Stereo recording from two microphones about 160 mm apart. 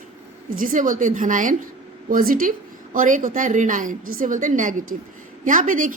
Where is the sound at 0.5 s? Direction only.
55° right (ahead or behind).